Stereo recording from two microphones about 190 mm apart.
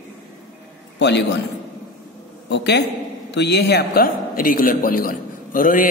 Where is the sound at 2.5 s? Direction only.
65° left (ahead or behind).